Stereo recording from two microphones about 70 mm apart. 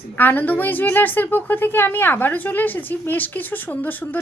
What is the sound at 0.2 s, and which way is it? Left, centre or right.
A woman's voice, left.